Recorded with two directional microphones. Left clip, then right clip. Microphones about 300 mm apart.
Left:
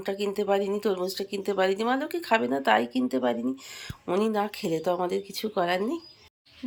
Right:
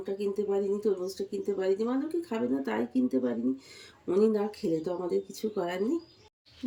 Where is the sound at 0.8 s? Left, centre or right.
Centre.